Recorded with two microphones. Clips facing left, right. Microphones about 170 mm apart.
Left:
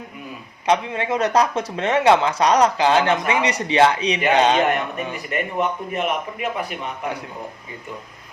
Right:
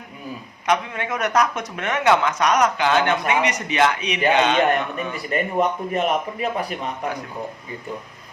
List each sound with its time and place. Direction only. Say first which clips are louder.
0.7 s speech: left 3 dB; 30° left (ahead or behind)
5.3 s speech: right 3 dB; 35° right (ahead or behind)